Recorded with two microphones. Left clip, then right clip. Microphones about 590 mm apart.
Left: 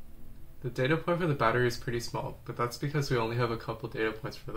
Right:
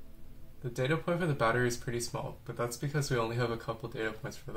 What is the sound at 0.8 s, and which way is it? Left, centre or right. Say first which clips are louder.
Speech: left 3 dB; centre.